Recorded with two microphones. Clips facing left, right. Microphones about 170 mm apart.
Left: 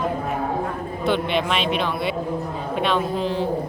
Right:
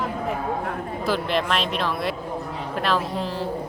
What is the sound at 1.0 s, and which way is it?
A man's voice, centre (ahead or behind).